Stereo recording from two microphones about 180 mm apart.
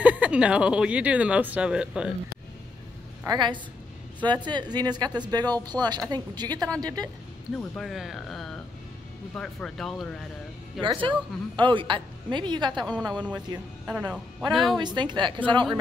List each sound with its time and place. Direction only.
0.0 s speech: 5° right (ahead or behind)
3.3 s speech: 25° right (ahead or behind)
7.5 s speech: centre (ahead or behind)
10.8 s speech: 30° right (ahead or behind)
12.7 s speech: centre (ahead or behind)
14.8 s speech: 25° right (ahead or behind)